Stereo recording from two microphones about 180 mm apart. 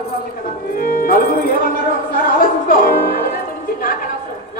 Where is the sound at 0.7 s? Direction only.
55° left (ahead or behind).